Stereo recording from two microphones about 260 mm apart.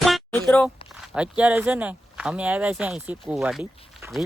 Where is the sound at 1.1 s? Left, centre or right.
Centre.